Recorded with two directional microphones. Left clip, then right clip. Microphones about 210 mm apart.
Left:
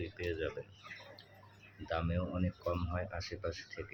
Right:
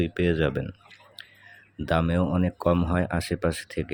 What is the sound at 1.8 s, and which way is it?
Speech, 45° right (ahead or behind).